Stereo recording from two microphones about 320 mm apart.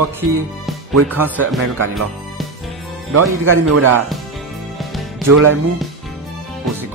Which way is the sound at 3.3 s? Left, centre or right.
Right.